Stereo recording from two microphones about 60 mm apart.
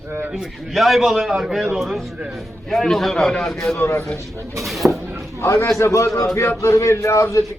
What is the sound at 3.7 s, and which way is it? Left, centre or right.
Speech, left.